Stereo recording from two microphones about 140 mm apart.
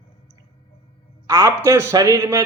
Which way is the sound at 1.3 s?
20° right (ahead or behind).